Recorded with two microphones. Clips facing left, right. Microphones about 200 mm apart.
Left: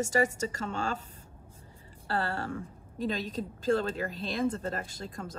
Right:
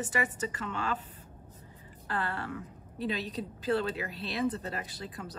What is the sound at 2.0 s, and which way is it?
A woman's voice, 45° left (ahead or behind).